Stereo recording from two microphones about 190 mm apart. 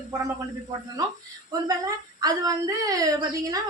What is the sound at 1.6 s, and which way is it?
A woman's voice, 20° right (ahead or behind).